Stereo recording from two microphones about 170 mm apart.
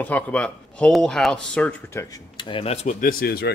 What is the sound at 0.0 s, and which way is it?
Speech, 10° left (ahead or behind).